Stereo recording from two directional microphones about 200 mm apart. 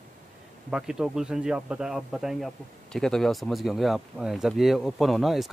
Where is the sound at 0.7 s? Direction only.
5° right (ahead or behind).